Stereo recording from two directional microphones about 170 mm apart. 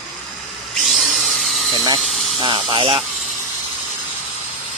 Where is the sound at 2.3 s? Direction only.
30° right (ahead or behind).